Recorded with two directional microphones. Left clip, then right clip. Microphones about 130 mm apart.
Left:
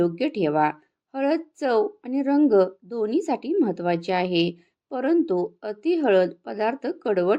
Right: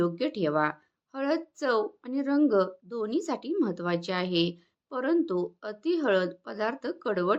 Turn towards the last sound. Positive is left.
turn(degrees=15)  # may be behind; listen again after turning